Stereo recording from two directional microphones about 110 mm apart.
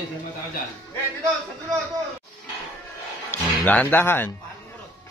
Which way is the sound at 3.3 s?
15° left (ahead or behind).